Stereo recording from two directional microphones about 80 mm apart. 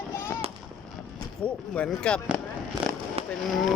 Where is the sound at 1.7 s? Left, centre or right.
Centre.